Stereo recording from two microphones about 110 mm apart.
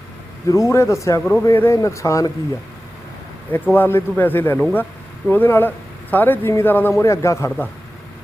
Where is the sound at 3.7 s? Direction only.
20° left (ahead or behind).